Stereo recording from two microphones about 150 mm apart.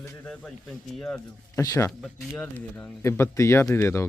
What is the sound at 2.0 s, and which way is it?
Speech, centre (ahead or behind).